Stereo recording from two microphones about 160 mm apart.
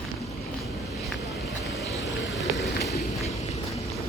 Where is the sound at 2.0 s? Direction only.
90° left.